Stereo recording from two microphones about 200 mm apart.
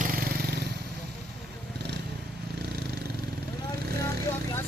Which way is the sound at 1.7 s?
55° right (ahead or behind).